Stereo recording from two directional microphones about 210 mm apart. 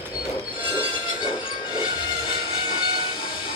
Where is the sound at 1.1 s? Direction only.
25° left (ahead or behind).